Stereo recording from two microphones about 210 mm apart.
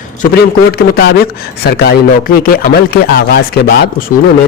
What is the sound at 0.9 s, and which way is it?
Speech, 50° left (ahead or behind).